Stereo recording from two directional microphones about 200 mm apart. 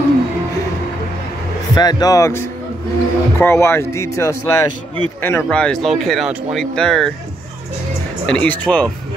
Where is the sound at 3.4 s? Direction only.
10° left (ahead or behind).